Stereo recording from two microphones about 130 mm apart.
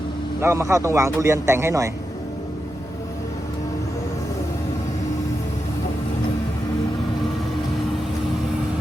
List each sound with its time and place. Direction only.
0.4 s a man's voice: 20° right (ahead or behind)